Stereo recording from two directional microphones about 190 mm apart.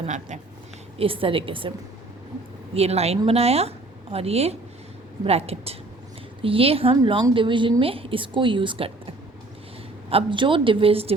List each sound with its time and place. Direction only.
0.0 s speech: 40° right (ahead or behind)
2.7 s speech: 35° right (ahead or behind)
10.1 s speech: 25° right (ahead or behind)